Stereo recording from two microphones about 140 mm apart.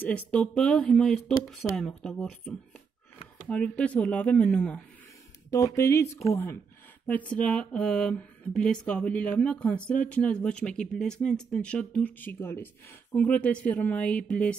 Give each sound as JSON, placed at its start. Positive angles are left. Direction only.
{"t": 0.0, "sound": "speech", "side_deg": 10}
{"t": 5.5, "sound": "speech", "side_deg": 25}